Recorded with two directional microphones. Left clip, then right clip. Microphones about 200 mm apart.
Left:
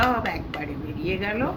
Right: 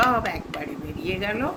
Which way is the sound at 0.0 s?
55° right (ahead or behind).